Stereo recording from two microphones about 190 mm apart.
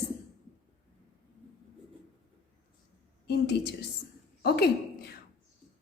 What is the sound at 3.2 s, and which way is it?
A woman's voice, 60° left (ahead or behind).